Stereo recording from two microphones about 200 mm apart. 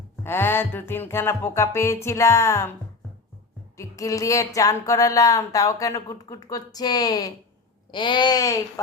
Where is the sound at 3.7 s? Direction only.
15° left (ahead or behind).